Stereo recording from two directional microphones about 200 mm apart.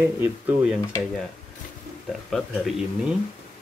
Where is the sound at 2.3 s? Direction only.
Centre (ahead or behind).